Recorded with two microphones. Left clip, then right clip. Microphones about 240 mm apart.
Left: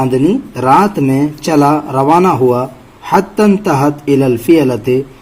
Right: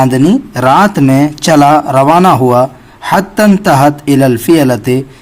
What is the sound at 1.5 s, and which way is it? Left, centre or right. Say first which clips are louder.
A man's voice: right 5 dB; right.